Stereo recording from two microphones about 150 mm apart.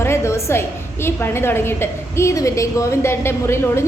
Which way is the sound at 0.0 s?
20° left (ahead or behind).